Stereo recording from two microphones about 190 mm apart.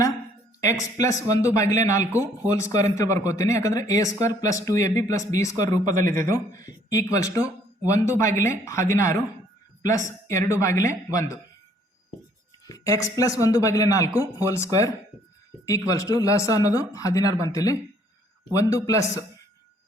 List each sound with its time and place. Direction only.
0.6 s speech: 15° left (ahead or behind)
12.6 s speech: 15° left (ahead or behind)
14.1 s speech: 10° right (ahead or behind)
14.4 s speech: 15° left (ahead or behind)
15.9 s speech: 15° left (ahead or behind)
18.9 s speech: 15° left (ahead or behind)